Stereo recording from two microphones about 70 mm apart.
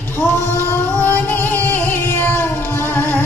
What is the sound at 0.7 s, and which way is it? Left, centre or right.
Music, left.